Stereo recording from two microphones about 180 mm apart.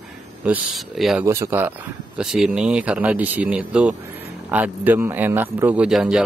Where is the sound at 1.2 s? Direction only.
15° right (ahead or behind).